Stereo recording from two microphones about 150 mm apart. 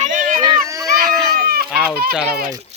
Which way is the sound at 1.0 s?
90° right.